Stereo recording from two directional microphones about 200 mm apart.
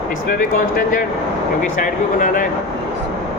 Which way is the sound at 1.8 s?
40° left (ahead or behind).